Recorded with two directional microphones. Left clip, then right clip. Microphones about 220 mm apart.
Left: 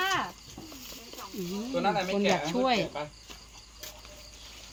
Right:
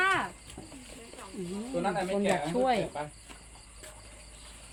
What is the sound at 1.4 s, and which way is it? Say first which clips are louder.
A child's voice: left 2 dB; 50° left (ahead or behind).